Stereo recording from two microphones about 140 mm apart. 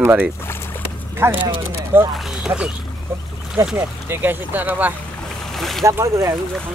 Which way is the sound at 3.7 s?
15° right (ahead or behind).